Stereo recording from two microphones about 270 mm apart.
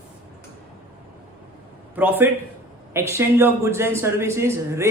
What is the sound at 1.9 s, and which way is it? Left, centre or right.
A man's voice, centre.